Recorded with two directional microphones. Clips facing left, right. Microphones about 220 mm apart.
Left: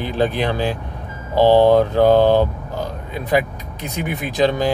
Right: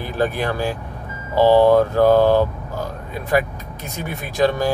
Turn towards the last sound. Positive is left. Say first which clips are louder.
# left 1 dB
turn(degrees=20)  # may be behind; listen again after turning